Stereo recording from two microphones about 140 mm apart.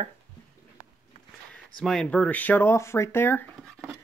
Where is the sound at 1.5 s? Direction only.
5° left (ahead or behind).